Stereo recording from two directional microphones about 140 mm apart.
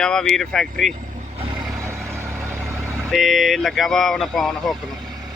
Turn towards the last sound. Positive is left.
turn(degrees=0)  # may be behind; listen again after turning